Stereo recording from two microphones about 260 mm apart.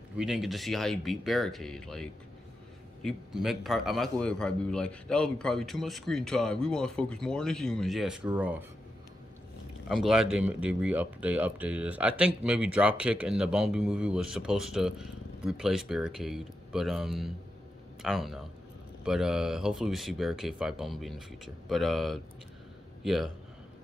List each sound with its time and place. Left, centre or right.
0.2 s speech: centre
9.8 s speech: centre